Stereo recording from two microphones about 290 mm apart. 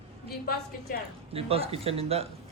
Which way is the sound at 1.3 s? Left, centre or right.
Centre.